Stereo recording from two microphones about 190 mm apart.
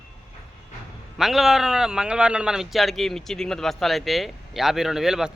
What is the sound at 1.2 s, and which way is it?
Speech, centre (ahead or behind).